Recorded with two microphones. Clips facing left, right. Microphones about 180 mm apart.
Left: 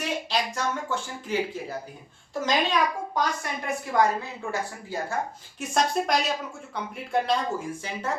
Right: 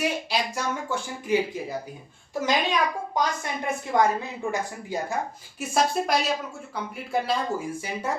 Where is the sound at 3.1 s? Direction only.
20° right (ahead or behind).